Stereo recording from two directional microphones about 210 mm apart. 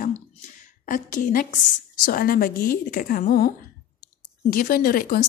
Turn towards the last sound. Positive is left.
turn(degrees=40)  # may be behind; listen again after turning